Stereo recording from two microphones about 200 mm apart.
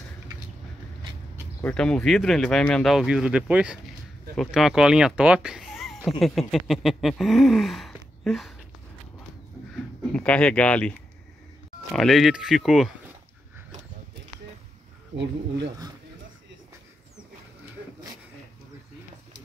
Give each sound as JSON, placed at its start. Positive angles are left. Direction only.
{"t": 1.6, "sound": "speech", "side_deg": 5}
{"t": 10.1, "sound": "speech", "side_deg": 5}
{"t": 15.1, "sound": "speech", "side_deg": -60}